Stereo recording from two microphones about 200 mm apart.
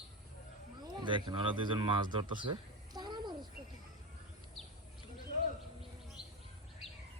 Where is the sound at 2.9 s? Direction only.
20° right (ahead or behind).